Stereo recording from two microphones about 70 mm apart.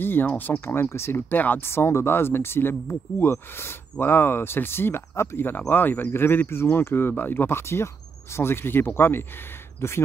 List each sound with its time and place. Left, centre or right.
0.0 s speech: left
1.3 s speech: left